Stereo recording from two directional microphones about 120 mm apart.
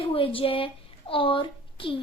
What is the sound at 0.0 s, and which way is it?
A woman's voice, 50° left (ahead or behind).